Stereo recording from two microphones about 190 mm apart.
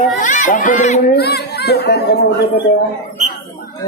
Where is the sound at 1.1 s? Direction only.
60° left (ahead or behind).